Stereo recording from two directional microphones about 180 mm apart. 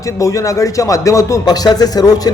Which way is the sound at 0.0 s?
15° left (ahead or behind).